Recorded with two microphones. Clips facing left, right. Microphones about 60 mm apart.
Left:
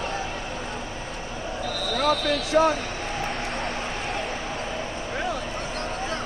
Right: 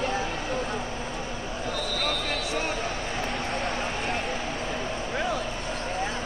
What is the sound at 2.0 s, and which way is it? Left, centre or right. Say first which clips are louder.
Basketball bounce: left 6 dB; left.